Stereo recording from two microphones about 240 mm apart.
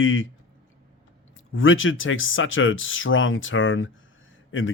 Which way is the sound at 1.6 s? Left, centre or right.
Left.